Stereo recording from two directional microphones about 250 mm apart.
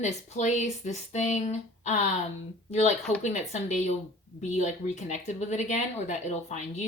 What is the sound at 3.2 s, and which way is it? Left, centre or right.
Speech, left.